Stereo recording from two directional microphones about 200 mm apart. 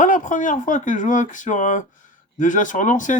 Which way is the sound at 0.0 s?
40° left (ahead or behind).